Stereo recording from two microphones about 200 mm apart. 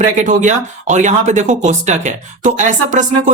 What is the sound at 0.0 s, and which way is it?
Speech, 35° right (ahead or behind).